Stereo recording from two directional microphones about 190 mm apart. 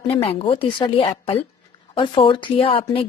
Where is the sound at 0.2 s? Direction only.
30° left (ahead or behind).